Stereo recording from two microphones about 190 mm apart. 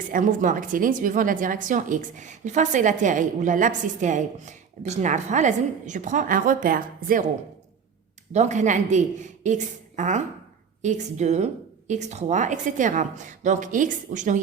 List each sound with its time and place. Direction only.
0.1 s a woman's voice: 45° right (ahead or behind)
8.3 s a woman's voice: 40° right (ahead or behind)